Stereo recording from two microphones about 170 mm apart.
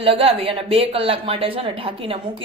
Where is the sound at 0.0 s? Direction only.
35° right (ahead or behind).